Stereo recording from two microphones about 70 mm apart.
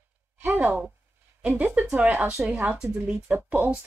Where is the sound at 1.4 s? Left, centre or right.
Right.